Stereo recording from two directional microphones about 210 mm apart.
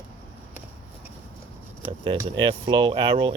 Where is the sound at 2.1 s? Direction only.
20° right (ahead or behind).